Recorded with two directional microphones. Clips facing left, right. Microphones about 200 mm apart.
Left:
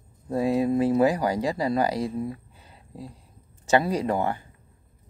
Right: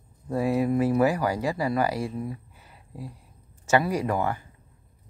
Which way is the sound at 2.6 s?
25° left (ahead or behind).